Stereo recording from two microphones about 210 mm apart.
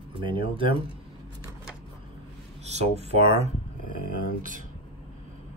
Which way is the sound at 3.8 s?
45° left (ahead or behind).